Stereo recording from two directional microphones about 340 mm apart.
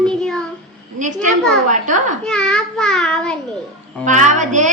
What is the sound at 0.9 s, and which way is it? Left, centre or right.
A woman's voice, right.